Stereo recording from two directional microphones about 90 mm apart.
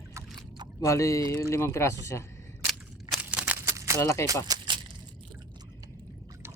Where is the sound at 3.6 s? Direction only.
30° right (ahead or behind).